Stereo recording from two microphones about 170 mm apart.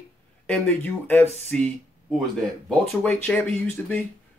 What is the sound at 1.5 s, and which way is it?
Speech, 5° left (ahead or behind).